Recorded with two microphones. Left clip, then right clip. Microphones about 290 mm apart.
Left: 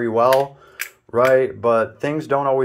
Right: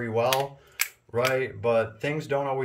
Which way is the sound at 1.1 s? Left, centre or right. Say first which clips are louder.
Left 11 dB; left.